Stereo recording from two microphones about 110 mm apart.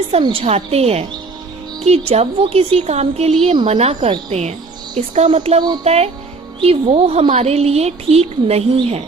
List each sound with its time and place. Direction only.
0.1 s a woman's voice: 55° right (ahead or behind); by 6.1 s 70° right (ahead or behind)
6.6 s a woman's voice: 60° right (ahead or behind)